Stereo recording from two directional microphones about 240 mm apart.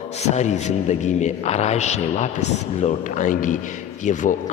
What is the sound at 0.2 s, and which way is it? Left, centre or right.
A man's voice, left.